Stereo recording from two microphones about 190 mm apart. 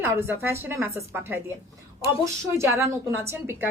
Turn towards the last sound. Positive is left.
turn(degrees=-15)  # may be behind; listen again after turning